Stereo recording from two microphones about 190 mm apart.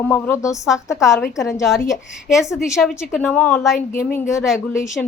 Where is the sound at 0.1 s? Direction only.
15° left (ahead or behind).